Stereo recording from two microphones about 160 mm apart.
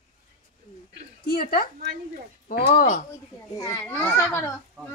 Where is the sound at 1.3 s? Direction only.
65° left (ahead or behind).